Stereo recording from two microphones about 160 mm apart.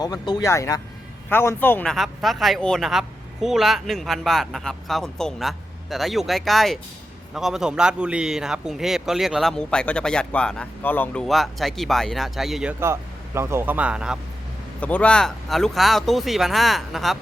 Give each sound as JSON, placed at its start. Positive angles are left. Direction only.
{"t": 0.0, "sound": "speech", "side_deg": 25}
{"t": 12.8, "sound": "speech", "side_deg": -15}
{"t": 14.8, "sound": "speech", "side_deg": 10}